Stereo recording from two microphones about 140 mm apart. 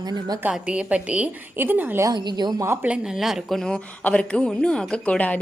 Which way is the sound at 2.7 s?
10° right (ahead or behind).